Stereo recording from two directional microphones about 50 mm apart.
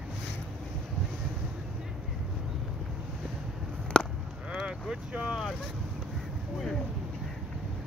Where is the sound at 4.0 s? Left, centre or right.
Centre.